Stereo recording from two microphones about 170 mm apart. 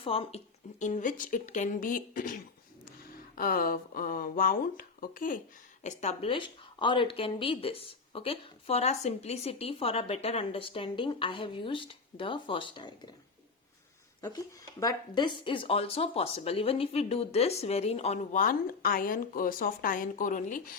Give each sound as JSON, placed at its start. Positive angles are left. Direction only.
{"t": 0.0, "sound": "speech", "side_deg": 35}
{"t": 5.8, "sound": "speech", "side_deg": 40}
{"t": 14.8, "sound": "speech", "side_deg": 25}